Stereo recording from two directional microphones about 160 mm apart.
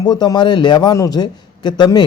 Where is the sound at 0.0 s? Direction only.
25° left (ahead or behind).